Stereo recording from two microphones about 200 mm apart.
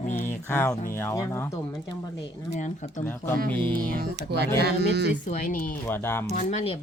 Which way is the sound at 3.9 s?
50° right (ahead or behind).